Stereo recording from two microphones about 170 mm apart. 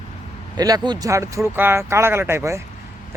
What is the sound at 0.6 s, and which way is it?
A man's voice, 20° right (ahead or behind).